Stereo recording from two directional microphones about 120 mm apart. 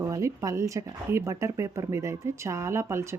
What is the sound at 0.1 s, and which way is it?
Speech, 25° right (ahead or behind).